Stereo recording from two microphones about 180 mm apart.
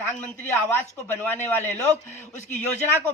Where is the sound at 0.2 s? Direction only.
10° left (ahead or behind).